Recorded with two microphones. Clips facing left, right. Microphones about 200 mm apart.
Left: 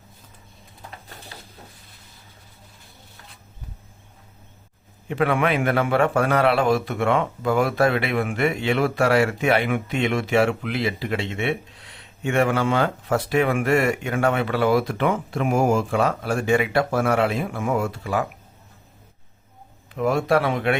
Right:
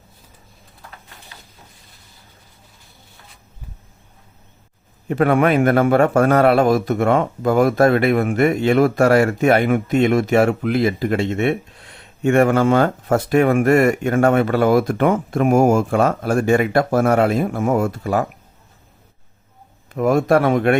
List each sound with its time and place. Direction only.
5.0 s a man's voice: 45° right (ahead or behind)
19.9 s a man's voice: 45° right (ahead or behind)